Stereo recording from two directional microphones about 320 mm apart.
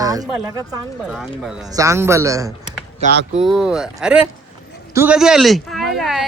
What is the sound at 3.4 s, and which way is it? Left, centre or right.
Speech, centre.